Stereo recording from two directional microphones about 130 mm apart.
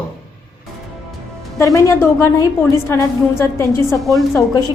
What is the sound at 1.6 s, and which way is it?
A woman's voice, 20° left (ahead or behind).